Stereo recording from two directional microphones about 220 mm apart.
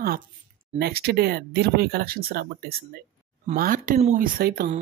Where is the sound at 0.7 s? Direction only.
45° right (ahead or behind).